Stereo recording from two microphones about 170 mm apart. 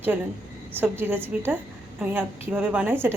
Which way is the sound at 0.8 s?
10° right (ahead or behind).